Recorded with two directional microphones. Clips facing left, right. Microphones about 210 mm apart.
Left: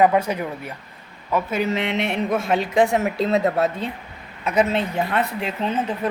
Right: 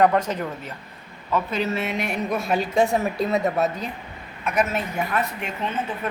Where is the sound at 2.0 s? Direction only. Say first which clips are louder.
Left 3 dB; 25° left (ahead or behind).